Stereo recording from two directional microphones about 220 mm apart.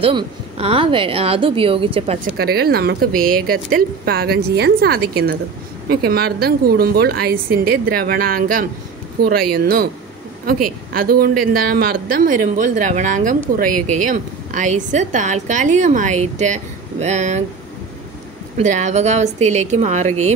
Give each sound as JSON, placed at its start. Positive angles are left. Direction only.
{"t": 0.0, "sound": "a woman's voice", "side_deg": -25}
{"t": 2.3, "sound": "speech", "side_deg": -45}
{"t": 18.6, "sound": "speech", "side_deg": -35}